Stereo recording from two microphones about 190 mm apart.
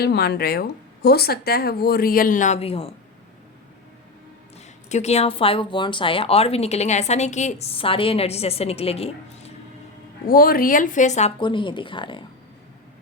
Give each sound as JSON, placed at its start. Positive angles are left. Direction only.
{"t": 0.0, "sound": "speech", "side_deg": 55}
{"t": 4.9, "sound": "speech", "side_deg": 35}
{"t": 10.2, "sound": "speech", "side_deg": 50}